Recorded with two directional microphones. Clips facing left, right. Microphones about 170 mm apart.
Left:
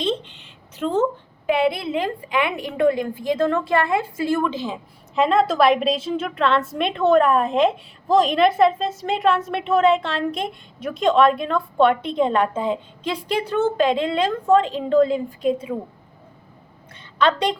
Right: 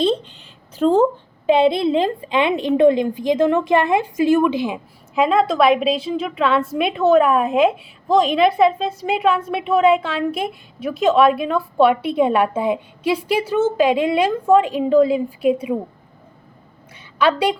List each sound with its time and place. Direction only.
0.0 s a child's voice: 35° right (ahead or behind); by 4.8 s 15° right (ahead or behind)
5.1 s a woman's voice: centre (ahead or behind)
16.9 s a sound: 10° right (ahead or behind)